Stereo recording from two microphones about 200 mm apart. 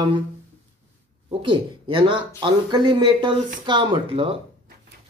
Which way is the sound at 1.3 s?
25° right (ahead or behind).